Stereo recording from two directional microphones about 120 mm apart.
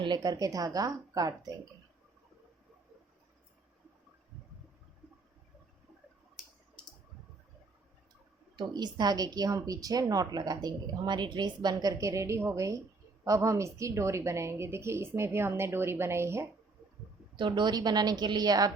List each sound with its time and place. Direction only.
0.0 s speech: 35° right (ahead or behind)
8.5 s a woman's voice: 35° right (ahead or behind)
17.3 s speech: 40° right (ahead or behind)